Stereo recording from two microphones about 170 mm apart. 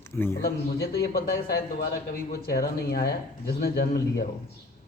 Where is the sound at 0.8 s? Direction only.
70° left (ahead or behind).